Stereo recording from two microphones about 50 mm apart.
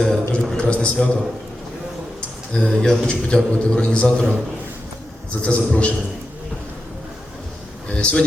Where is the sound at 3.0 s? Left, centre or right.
Centre.